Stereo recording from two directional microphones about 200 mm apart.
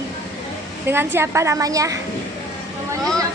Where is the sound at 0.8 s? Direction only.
10° right (ahead or behind).